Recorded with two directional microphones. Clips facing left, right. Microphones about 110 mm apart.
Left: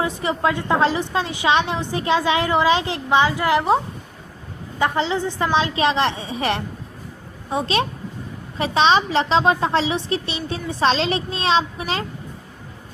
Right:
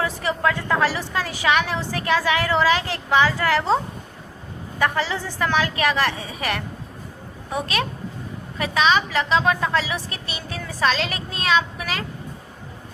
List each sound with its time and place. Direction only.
0.0 s a woman's voice: 20° left (ahead or behind)
4.8 s a woman's voice: 20° left (ahead or behind)